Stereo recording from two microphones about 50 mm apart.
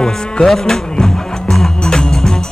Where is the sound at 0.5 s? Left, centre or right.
Centre.